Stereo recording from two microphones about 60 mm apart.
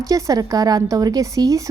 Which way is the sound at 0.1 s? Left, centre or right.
Right.